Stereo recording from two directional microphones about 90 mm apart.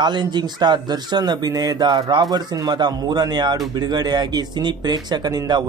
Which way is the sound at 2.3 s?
50° right (ahead or behind).